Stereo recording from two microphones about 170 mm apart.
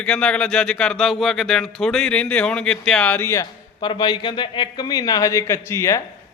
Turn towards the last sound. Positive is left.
turn(degrees=15)  # may be behind; listen again after turning